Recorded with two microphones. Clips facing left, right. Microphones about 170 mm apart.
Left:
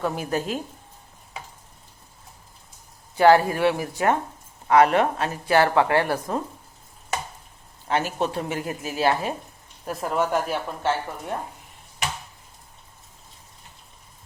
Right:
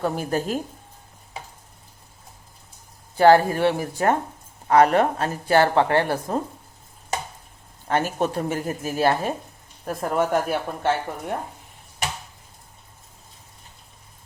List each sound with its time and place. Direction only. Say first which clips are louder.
0.0 s speech: right 2 dB; 35° right (ahead or behind)
3.2 s speech: right 1 dB; 35° right (ahead or behind)
7.9 s speech: right 2 dB; 50° right (ahead or behind)